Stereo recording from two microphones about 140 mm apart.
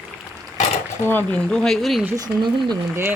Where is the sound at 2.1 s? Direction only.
30° right (ahead or behind).